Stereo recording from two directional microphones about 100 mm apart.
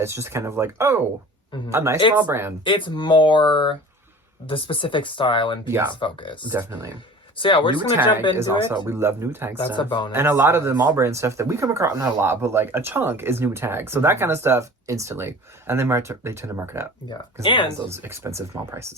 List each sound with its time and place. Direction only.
0.0 s speech: 25° right (ahead or behind)
2.6 s speech: 55° left (ahead or behind)
5.6 s speech: 25° right (ahead or behind)
6.0 s speech: 55° left (ahead or behind)
6.5 s speech: 25° right (ahead or behind)
7.3 s speech: 60° left (ahead or behind)
8.4 s speech: 25° right (ahead or behind)
9.6 s speech: 55° left (ahead or behind)
10.1 s speech: 20° right (ahead or behind)
17.4 s speech: 55° left (ahead or behind)
17.8 s speech: 25° right (ahead or behind)